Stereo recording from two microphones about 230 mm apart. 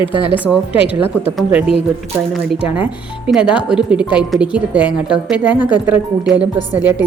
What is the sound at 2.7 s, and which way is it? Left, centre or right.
Speech, centre.